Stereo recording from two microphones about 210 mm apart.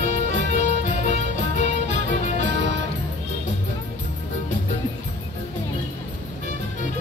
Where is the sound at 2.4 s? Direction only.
60° right (ahead or behind).